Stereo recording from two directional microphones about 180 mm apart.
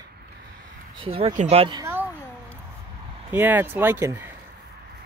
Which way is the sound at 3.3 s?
10° right (ahead or behind).